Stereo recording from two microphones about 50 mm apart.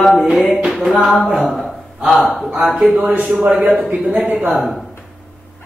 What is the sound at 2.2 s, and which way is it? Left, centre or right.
Mantra, centre.